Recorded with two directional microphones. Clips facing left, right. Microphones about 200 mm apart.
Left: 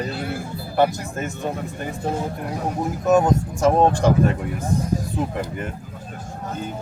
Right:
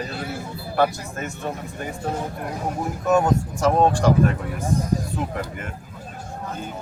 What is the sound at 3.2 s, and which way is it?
Speech, 20° left (ahead or behind).